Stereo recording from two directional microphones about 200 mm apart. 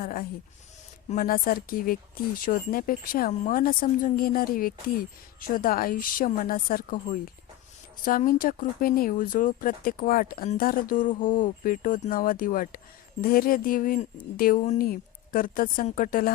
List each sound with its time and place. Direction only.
0.0 s speech: 45° left (ahead or behind)
8.0 s speech: 45° left (ahead or behind)